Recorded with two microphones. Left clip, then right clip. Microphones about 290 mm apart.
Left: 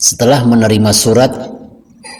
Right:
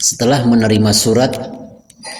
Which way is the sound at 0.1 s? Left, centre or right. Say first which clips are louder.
Left 3 dB; centre.